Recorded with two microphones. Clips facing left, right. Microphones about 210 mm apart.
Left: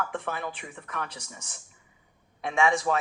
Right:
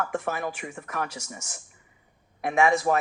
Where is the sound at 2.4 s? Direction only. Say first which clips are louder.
Right 3 dB; 60° right (ahead or behind).